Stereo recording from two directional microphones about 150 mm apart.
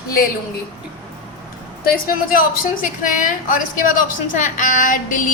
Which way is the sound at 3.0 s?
65° left (ahead or behind).